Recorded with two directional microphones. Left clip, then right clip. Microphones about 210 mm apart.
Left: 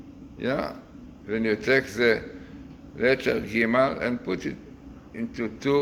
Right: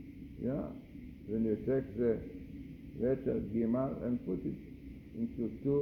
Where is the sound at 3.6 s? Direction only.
25° left (ahead or behind).